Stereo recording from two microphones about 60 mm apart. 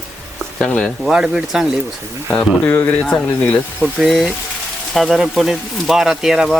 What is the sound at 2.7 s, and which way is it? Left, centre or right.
Speech, left.